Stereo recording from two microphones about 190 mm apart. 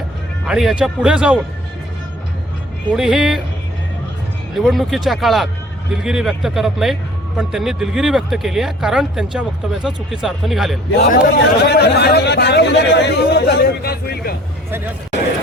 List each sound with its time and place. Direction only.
0.4 s speech: 5° right (ahead or behind)
2.9 s speech: 5° right (ahead or behind)
4.5 s speech: centre (ahead or behind)
10.9 s speech: 50° left (ahead or behind)